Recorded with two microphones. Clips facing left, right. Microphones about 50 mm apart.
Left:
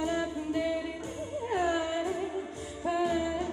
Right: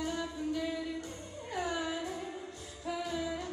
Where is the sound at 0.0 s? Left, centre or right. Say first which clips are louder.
Left 5 dB; left.